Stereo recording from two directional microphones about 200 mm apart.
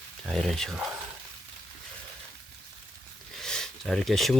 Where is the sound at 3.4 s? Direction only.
5° left (ahead or behind).